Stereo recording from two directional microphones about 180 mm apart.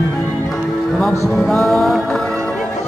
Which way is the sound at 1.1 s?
15° left (ahead or behind).